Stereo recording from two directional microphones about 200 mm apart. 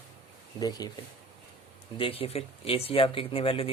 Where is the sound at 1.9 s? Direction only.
30° left (ahead or behind).